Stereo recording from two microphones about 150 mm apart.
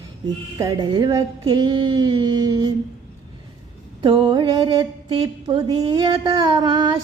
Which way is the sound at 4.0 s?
30° right (ahead or behind).